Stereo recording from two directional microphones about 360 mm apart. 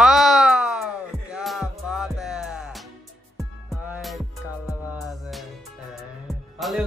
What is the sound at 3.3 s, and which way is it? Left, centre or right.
Music, centre.